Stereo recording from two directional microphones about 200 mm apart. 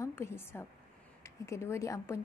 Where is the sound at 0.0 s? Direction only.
10° left (ahead or behind).